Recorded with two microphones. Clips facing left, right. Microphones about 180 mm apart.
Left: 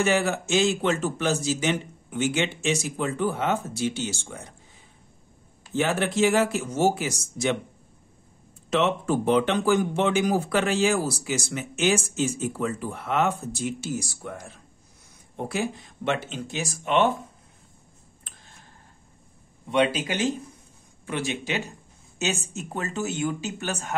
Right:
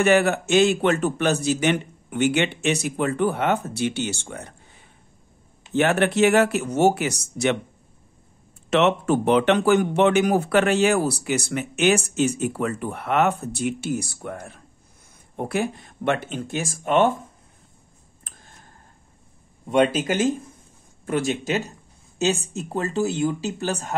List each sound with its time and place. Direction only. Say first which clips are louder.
0.0 s speech: right 5 dB; 60° right (ahead or behind)
8.6 s speech: right 4 dB; 70° right (ahead or behind); by 17.3 s 45° right (ahead or behind)
18.2 s tick: right 4 dB; 45° right (ahead or behind)
19.7 s speech: right 4 dB; 45° right (ahead or behind)